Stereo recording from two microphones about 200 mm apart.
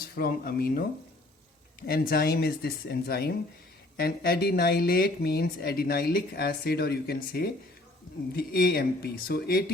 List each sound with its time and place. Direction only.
0.0 s speech: 50° left (ahead or behind)
1.9 s speech: 50° left (ahead or behind)